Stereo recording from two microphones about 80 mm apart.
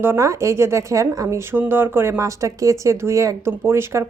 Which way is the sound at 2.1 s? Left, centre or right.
Right.